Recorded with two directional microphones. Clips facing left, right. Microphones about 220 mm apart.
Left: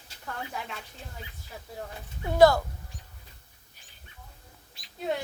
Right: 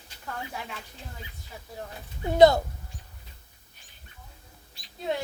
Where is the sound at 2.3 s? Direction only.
20° right (ahead or behind).